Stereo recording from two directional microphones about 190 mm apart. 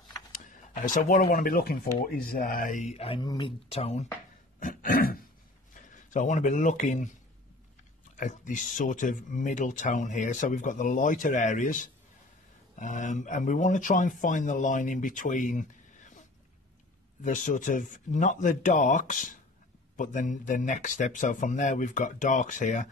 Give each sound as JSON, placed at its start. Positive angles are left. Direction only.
{"t": 0.3, "sound": "speech", "side_deg": 45}
{"t": 4.6, "sound": "throat clearing", "side_deg": 45}
{"t": 5.8, "sound": "speech", "side_deg": 45}
{"t": 8.2, "sound": "speech", "side_deg": 40}